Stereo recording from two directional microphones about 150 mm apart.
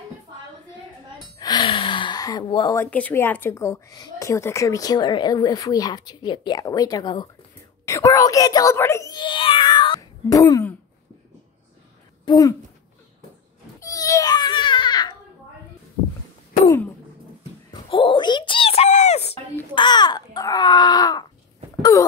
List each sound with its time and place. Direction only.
1.4 s gasp: 30° left (ahead or behind)
2.8 s a woman's voice: 10° left (ahead or behind)
9.1 s cat: 30° left (ahead or behind)
12.3 s a woman's voice: 25° left (ahead or behind)
13.7 s babbling: 20° left (ahead or behind)
16.6 s a sound: 15° left (ahead or behind)
18.1 s a sound: 30° left (ahead or behind); by 19.3 s 45° left (ahead or behind)
19.7 s wail: 30° left (ahead or behind)